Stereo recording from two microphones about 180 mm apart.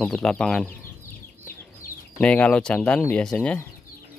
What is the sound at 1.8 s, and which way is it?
Chicken, 55° left (ahead or behind).